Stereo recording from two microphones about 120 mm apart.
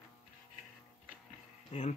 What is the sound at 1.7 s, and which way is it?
Speech, 65° left (ahead or behind).